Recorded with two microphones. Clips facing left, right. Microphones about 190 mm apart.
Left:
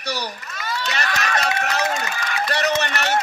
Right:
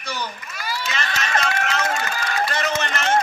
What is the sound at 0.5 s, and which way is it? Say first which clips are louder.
Run: left 1 dB; centre (ahead or behind).